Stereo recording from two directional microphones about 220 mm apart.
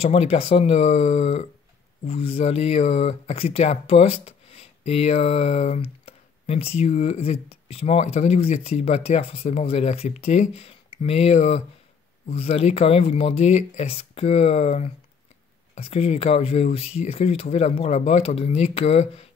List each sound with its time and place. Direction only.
0.0 s speech: 25° left (ahead or behind)